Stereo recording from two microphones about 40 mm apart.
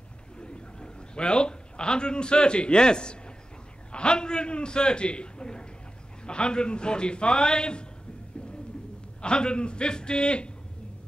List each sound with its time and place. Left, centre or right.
0.4 s a man's voice: left
9.2 s a man's voice: left